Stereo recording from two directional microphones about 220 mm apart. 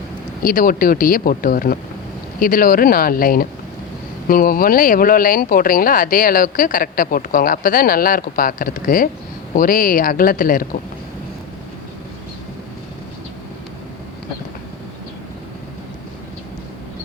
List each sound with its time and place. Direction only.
0.4 s speech: 40° left (ahead or behind)